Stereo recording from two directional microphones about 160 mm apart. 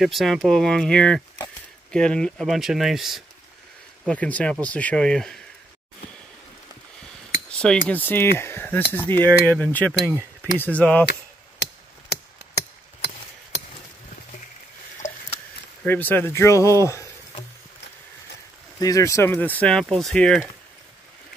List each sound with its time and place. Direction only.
0.0 s speech: centre (ahead or behind)
7.4 s cutlery: 5° left (ahead or behind)
7.9 s speech: 10° left (ahead or behind)
11.6 s a sound: 90° left
15.8 s speech: 10° left (ahead or behind)
18.8 s speech: 20° left (ahead or behind); by 20.4 s 5° left (ahead or behind)